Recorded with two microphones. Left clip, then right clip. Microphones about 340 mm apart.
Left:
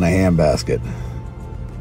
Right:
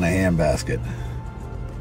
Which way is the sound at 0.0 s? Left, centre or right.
Centre.